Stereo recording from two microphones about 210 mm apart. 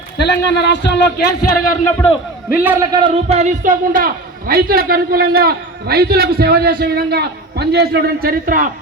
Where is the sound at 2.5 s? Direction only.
10° right (ahead or behind).